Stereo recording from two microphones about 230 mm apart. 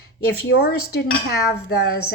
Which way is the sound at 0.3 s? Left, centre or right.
Left.